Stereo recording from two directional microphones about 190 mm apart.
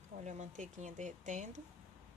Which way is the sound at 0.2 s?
40° right (ahead or behind).